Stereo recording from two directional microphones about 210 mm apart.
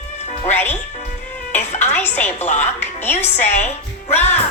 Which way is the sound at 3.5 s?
35° left (ahead or behind).